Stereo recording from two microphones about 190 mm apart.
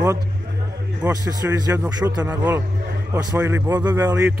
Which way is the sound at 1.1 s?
20° right (ahead or behind).